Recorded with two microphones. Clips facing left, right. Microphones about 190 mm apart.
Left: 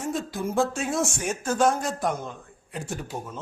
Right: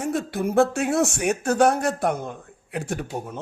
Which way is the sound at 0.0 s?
65° right (ahead or behind).